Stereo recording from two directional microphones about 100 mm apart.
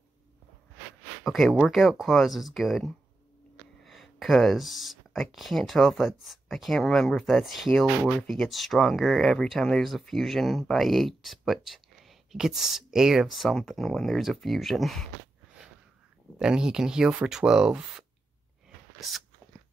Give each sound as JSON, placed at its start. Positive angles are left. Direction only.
{"t": 1.2, "sound": "speech", "side_deg": 0}
{"t": 16.3, "sound": "speech", "side_deg": -5}